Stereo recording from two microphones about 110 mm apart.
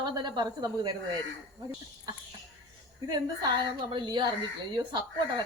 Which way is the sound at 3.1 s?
40° right (ahead or behind).